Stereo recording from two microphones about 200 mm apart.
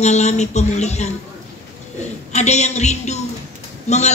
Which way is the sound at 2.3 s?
35° left (ahead or behind).